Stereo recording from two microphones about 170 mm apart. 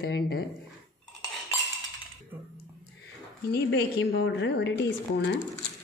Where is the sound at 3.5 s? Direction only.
85° left.